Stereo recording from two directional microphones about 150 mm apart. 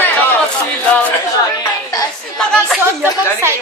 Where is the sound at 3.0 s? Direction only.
15° right (ahead or behind).